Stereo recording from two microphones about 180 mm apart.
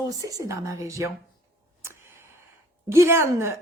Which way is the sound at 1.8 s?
15° right (ahead or behind).